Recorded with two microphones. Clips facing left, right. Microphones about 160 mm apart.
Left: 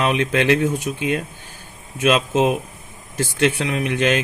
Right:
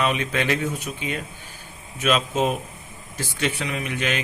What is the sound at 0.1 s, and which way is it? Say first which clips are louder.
Speech: left 6 dB; 65° left (ahead or behind).